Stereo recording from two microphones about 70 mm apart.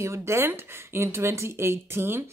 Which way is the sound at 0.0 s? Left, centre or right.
Right.